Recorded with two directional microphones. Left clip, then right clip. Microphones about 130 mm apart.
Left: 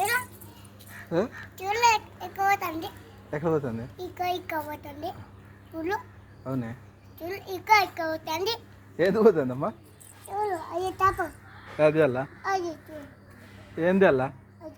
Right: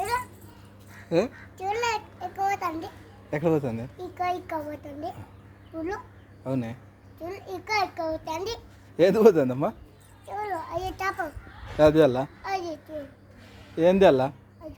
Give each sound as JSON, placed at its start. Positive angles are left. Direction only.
{"t": 0.0, "sound": "dog", "side_deg": -15}
{"t": 1.5, "sound": "a sound", "side_deg": -25}
{"t": 3.2, "sound": "a man's voice", "side_deg": -50}
{"t": 3.9, "sound": "a child's voice", "side_deg": -20}
{"t": 6.4, "sound": "speech", "side_deg": -50}
{"t": 7.2, "sound": "a child's voice", "side_deg": -20}
{"t": 9.0, "sound": "a man's voice", "side_deg": -60}
{"t": 10.3, "sound": "a child's voice", "side_deg": -30}
{"t": 11.8, "sound": "a man's voice", "side_deg": -45}
{"t": 12.4, "sound": "a child's voice", "side_deg": -20}
{"t": 13.7, "sound": "speech", "side_deg": -40}